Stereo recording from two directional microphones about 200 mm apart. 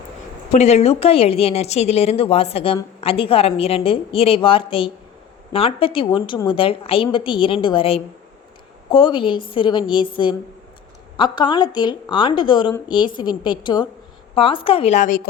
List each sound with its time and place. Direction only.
0.5 s a woman's voice: 35° left (ahead or behind)